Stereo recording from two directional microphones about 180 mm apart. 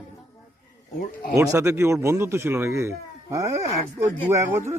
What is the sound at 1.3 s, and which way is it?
Speech, 15° right (ahead or behind).